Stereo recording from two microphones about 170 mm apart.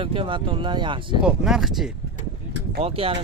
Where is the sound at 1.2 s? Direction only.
Centre (ahead or behind).